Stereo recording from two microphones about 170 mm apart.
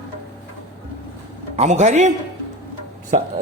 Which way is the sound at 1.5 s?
45° right (ahead or behind).